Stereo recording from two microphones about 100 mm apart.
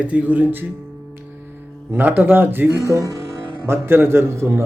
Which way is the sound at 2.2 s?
20° right (ahead or behind).